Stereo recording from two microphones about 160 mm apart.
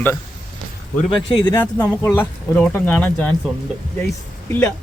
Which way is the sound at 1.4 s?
10° left (ahead or behind).